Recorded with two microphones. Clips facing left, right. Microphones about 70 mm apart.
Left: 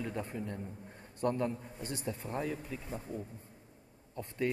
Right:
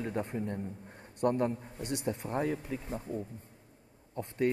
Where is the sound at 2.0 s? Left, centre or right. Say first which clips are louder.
Right 4 dB; right.